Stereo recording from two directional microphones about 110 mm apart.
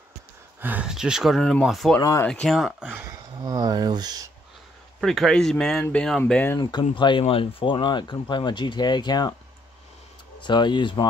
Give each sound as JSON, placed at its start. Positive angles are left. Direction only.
{"t": 0.6, "sound": "speech", "side_deg": -15}
{"t": 0.8, "sound": "speech", "side_deg": -5}
{"t": 2.0, "sound": "speech", "side_deg": 30}
{"t": 2.4, "sound": "speech", "side_deg": 0}
{"t": 2.8, "sound": "speech", "side_deg": -10}
{"t": 3.1, "sound": "speech", "side_deg": -35}
{"t": 5.0, "sound": "speech", "side_deg": 0}
{"t": 6.6, "sound": "speech", "side_deg": 40}
{"t": 10.4, "sound": "speech", "side_deg": 45}